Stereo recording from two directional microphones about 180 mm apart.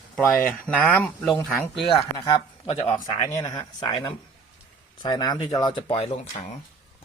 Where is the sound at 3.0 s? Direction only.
20° left (ahead or behind).